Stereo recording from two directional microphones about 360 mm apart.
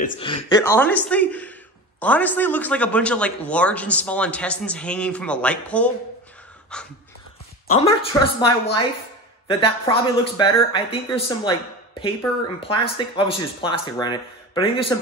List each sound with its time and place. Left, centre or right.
0.0 s a man's voice: centre
7.6 s speech: centre